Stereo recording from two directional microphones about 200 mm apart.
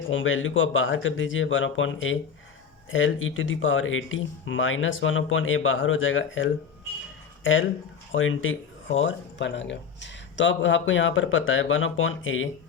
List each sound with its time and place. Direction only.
0.1 s speech: 75° left (ahead or behind)
8.1 s speech: 80° left
9.0 s speech: 70° left (ahead or behind)